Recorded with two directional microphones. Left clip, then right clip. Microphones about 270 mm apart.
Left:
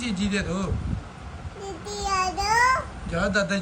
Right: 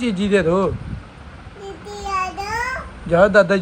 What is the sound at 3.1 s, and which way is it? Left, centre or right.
Speech, centre.